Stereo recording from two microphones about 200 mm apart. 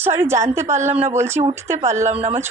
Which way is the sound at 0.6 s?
35° right (ahead or behind).